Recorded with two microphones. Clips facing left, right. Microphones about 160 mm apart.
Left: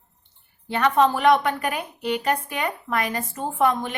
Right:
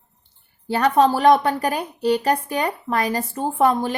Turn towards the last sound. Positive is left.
turn(degrees=-35)  # may be behind; listen again after turning